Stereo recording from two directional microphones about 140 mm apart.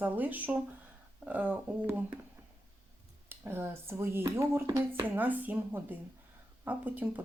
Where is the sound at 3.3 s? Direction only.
15° right (ahead or behind).